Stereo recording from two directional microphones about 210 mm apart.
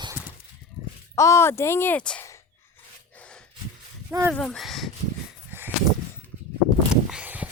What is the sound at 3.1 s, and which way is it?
Gasp, 5° left (ahead or behind).